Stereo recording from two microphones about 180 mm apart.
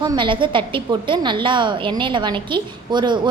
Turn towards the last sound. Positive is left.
turn(degrees=-25)  # may be behind; listen again after turning